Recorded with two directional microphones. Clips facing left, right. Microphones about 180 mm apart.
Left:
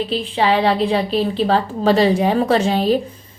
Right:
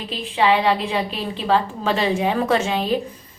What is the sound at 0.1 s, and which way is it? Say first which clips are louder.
A woman's voice: right 2 dB; 35° left (ahead or behind).